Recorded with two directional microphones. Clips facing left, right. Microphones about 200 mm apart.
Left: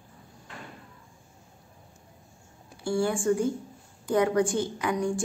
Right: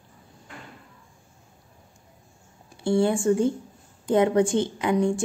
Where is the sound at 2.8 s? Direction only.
25° right (ahead or behind).